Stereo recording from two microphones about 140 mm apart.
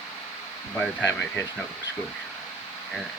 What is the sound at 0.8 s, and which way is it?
Speech, 10° left (ahead or behind).